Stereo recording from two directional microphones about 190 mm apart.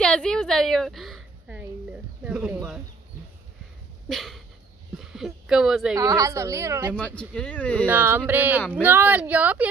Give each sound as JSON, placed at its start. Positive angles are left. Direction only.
{"t": 0.0, "sound": "a sound", "side_deg": 5}
{"t": 4.1, "sound": "a sound", "side_deg": 0}
{"t": 4.9, "sound": "speech", "side_deg": -5}
{"t": 5.9, "sound": "a woman's voice", "side_deg": -20}
{"t": 7.2, "sound": "speech", "side_deg": 5}
{"t": 7.8, "sound": "a woman's voice", "side_deg": -10}